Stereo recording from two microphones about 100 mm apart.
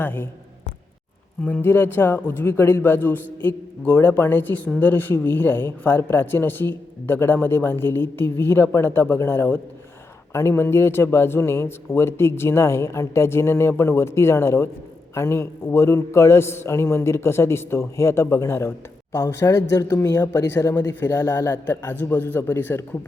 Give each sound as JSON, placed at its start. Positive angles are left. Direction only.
{"t": 0.0, "sound": "speech", "side_deg": 20}
{"t": 1.5, "sound": "speech", "side_deg": 20}